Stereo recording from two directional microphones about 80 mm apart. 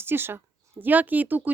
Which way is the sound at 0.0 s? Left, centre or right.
Right.